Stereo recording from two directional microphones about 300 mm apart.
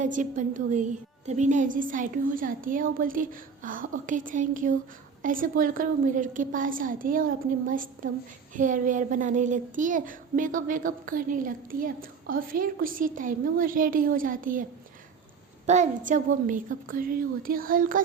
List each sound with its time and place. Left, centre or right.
0.0 s a woman's voice: right